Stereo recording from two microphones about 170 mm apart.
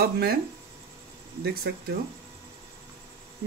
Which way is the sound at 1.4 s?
65° right (ahead or behind).